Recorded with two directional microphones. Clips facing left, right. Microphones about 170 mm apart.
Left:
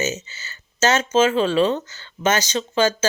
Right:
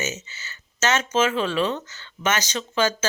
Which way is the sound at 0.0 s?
30° left (ahead or behind).